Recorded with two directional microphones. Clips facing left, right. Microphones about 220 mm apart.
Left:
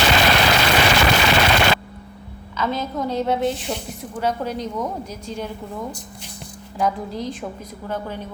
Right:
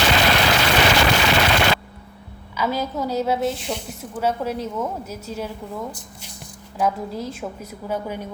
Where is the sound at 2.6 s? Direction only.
10° right (ahead or behind).